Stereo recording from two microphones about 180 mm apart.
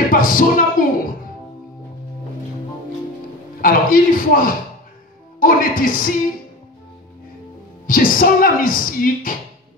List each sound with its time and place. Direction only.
0.1 s speech: 50° left (ahead or behind)
3.6 s a woman's voice: 50° left (ahead or behind)
7.8 s a woman's voice: 50° left (ahead or behind)